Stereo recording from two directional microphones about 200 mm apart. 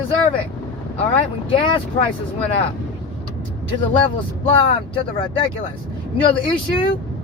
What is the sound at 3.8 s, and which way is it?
Speech, 25° left (ahead or behind).